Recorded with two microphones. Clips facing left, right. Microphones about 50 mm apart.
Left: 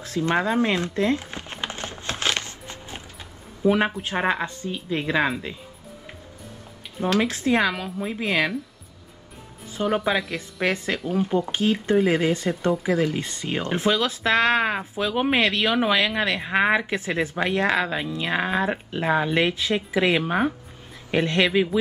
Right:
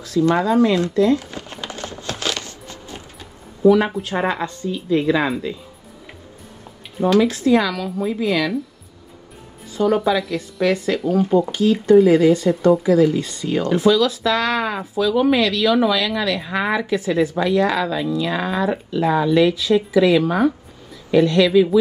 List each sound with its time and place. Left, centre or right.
0.0 s typing: left
3.6 s a woman's voice: left
7.1 s speech: left
9.7 s music: left
10.3 s speech: left